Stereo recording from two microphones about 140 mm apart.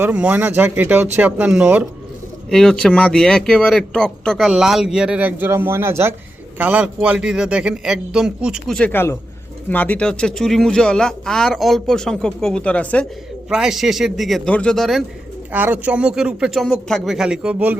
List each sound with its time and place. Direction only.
0.0 s speech: 10° right (ahead or behind)
2.5 s speech: 5° left (ahead or behind)
8.9 s a man's voice: 15° left (ahead or behind)
13.5 s speech: 5° right (ahead or behind)
15.5 s speech: 10° right (ahead or behind)